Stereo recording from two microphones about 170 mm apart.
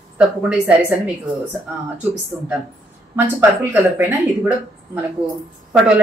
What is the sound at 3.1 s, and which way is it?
A woman's voice, 15° right (ahead or behind).